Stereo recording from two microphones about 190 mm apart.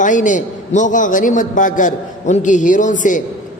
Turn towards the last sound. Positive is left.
turn(degrees=40)  # may be behind; listen again after turning